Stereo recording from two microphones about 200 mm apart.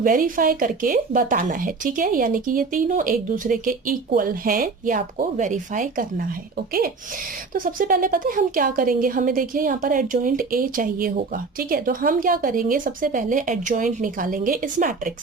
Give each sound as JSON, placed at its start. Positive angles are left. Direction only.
{"t": 0.0, "sound": "speech", "side_deg": -45}
{"t": 7.5, "sound": "speech", "side_deg": -45}